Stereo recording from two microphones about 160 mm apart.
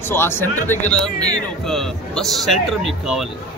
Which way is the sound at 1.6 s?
5° left (ahead or behind).